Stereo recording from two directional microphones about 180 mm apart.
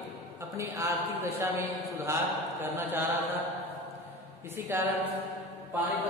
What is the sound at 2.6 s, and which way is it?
Speech, 10° right (ahead or behind).